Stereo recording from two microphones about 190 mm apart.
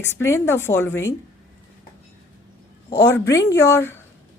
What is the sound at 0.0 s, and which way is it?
Speech, 15° left (ahead or behind).